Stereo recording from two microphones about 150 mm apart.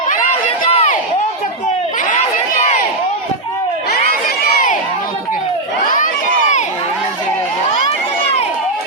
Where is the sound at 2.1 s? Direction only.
55° left (ahead or behind).